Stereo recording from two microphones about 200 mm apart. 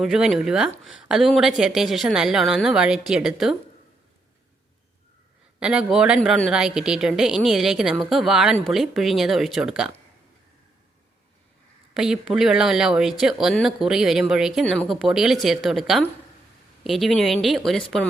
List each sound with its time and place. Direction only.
0.0 s speech: centre (ahead or behind)
5.5 s speech: 5° right (ahead or behind)
11.9 s speech: centre (ahead or behind)